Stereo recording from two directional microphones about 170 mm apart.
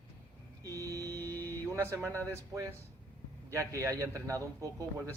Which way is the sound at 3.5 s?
20° right (ahead or behind).